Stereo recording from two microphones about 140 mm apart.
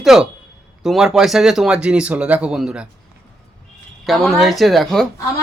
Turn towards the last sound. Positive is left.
turn(degrees=0)  # may be behind; listen again after turning